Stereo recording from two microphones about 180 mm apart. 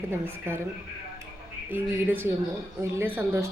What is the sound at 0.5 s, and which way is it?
Speech, 15° right (ahead or behind).